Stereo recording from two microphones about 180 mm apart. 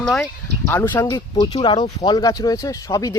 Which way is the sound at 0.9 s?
20° left (ahead or behind).